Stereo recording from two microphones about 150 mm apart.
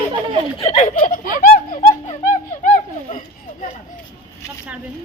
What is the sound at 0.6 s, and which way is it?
Snicker, 45° left (ahead or behind).